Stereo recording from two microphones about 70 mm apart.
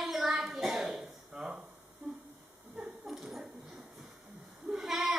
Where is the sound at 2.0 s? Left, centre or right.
Right.